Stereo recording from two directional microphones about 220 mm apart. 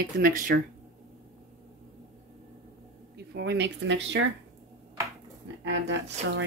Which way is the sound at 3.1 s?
50° right (ahead or behind).